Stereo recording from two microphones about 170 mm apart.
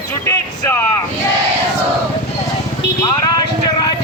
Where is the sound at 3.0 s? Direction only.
20° left (ahead or behind).